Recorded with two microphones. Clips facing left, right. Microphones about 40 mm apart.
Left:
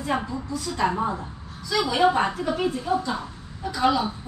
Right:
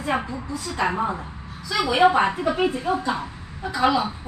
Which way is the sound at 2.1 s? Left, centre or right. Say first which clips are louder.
Right 3 dB; right.